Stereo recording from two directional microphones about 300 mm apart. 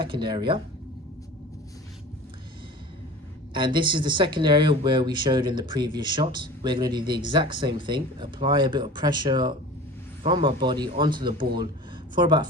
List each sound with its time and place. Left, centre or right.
0.0 s speech: centre
3.5 s speech: centre